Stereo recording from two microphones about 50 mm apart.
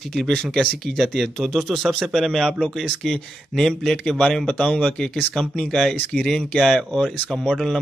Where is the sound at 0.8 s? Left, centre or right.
Centre.